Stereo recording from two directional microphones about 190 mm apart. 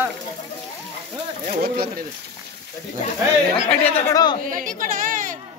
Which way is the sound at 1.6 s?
50° right (ahead or behind).